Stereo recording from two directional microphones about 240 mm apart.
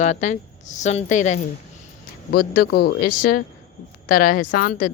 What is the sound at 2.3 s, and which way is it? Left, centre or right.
Speech, left.